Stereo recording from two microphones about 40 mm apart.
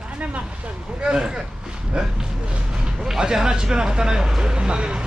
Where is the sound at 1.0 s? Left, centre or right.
Centre.